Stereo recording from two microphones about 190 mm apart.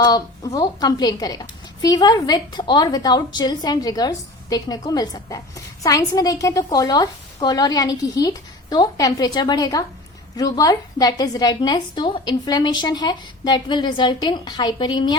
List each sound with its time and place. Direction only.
0.0 s a woman's voice: 20° left (ahead or behind)